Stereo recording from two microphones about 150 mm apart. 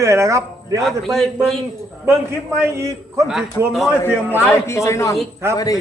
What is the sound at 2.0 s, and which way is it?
A man's voice, 15° right (ahead or behind).